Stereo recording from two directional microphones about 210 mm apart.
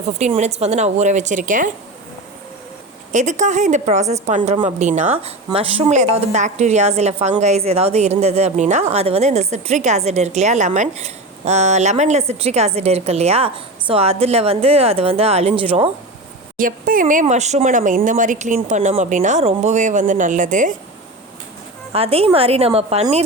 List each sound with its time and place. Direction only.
0.2 s speech: 30° right (ahead or behind)
3.1 s speech: 35° right (ahead or behind)
16.6 s speech: 40° right (ahead or behind)
21.9 s a woman's voice: 25° right (ahead or behind)